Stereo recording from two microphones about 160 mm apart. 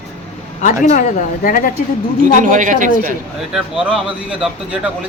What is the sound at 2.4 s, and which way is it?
Speech, 55° right (ahead or behind).